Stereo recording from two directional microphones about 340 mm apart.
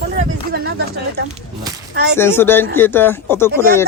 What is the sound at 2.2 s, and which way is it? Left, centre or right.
Speech, centre.